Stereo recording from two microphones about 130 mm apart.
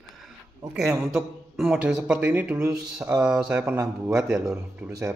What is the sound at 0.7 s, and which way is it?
Speech, 5° right (ahead or behind).